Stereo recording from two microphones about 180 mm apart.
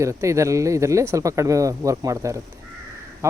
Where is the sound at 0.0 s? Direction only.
15° right (ahead or behind).